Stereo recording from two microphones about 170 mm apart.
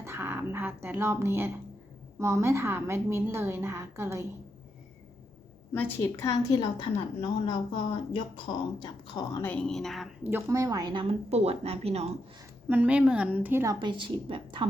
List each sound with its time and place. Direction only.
0.0 s a woman's voice: 15° right (ahead or behind)
5.7 s a woman's voice: 10° left (ahead or behind)
8.8 s a woman's voice: 25° left (ahead or behind)
9.4 s speech: 10° left (ahead or behind)
10.2 s a woman's voice: 15° right (ahead or behind); by 12.0 s 35° right (ahead or behind)
12.6 s a woman's voice: 10° right (ahead or behind)
13.7 s a woman's voice: 30° right (ahead or behind)